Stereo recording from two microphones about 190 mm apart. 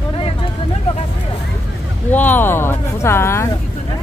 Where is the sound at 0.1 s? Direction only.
30° left (ahead or behind).